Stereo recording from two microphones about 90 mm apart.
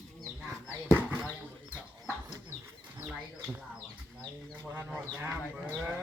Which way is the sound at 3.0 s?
20° right (ahead or behind).